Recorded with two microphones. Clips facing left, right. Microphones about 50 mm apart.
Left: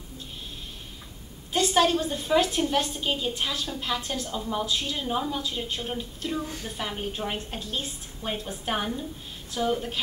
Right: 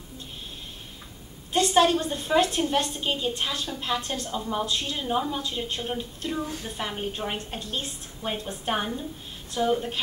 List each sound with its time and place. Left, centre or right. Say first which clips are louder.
1.5 s a woman's voice: right 2 dB; centre
6.4 s a woman's voice: right 2 dB; right
6.8 s a woman's voice: even; centre